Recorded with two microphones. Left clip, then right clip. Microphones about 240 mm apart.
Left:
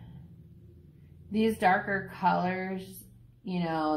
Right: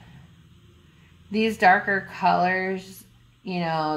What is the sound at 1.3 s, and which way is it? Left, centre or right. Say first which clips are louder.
Speech: right 7 dB; right.